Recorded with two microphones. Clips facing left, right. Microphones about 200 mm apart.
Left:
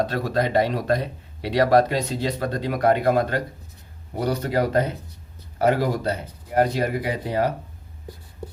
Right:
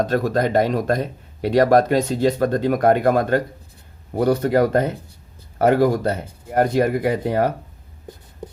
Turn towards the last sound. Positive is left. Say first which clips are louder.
# right 4 dB
turn(degrees=-50)  # may be behind; listen again after turning